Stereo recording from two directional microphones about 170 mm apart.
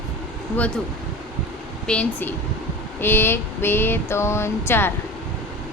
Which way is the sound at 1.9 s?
5° left (ahead or behind).